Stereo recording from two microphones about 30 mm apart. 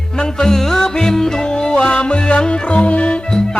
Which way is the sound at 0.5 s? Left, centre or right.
Centre.